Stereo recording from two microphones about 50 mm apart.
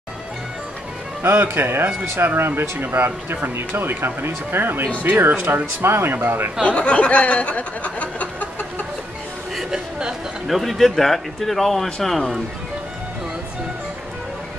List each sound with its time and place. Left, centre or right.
1.4 s speech: right
6.6 s speech: left
9.6 s a sound: centre
10.5 s speech: centre